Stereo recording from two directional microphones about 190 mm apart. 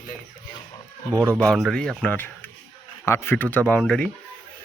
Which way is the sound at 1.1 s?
15° right (ahead or behind).